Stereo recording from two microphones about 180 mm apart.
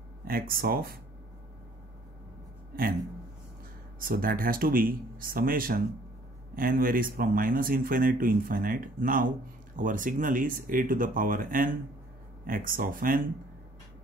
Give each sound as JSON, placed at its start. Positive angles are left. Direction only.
{"t": 0.3, "sound": "speech", "side_deg": -55}
{"t": 2.7, "sound": "speech", "side_deg": -55}
{"t": 4.0, "sound": "speech", "side_deg": -50}